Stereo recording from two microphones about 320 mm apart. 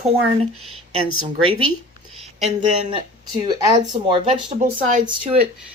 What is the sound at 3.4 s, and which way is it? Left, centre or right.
Speech, centre.